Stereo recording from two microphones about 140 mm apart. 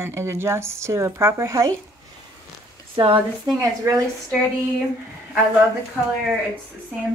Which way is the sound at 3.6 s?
20° right (ahead or behind).